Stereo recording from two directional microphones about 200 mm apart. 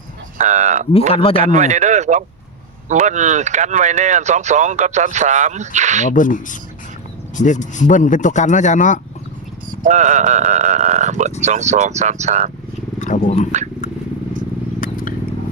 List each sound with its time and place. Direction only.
0.3 s speech: 35° right (ahead or behind)
1.1 s a man's voice: 25° left (ahead or behind)
1.5 s speech: 35° right (ahead or behind)
6.1 s speech: 40° left (ahead or behind)
9.8 s speech: 35° right (ahead or behind)
13.0 s a sound: 40° left (ahead or behind)
14.8 s vehicle: 45° left (ahead or behind)